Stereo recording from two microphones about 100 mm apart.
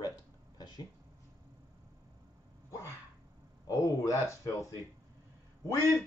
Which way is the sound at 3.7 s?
30° left (ahead or behind).